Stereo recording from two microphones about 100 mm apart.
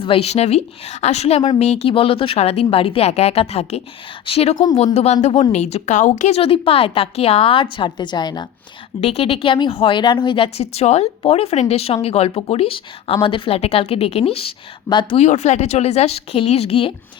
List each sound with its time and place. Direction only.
0.0 s speech: 75° left (ahead or behind)
4.5 s a woman's voice: 45° left (ahead or behind)
4.9 s speech: 90° left
6.3 s speech: 70° left (ahead or behind); by 8.4 s 45° left (ahead or behind)
9.0 s speech: 85° left
13.2 s speech: 60° left (ahead or behind)
15.1 s speech: 90° left